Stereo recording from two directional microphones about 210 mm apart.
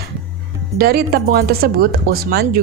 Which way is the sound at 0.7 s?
45° right (ahead or behind).